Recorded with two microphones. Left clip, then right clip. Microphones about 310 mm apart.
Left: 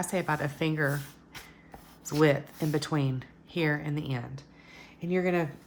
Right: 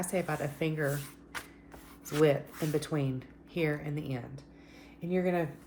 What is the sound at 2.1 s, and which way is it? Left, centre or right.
A woman's voice, left.